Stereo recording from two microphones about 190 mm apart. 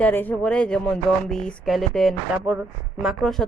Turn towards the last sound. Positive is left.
turn(degrees=0)  # may be behind; listen again after turning